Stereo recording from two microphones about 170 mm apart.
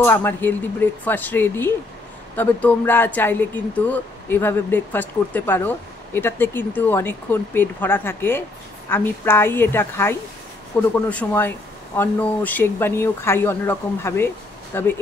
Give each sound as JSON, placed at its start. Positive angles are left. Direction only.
{"t": 0.0, "sound": "speech", "side_deg": 10}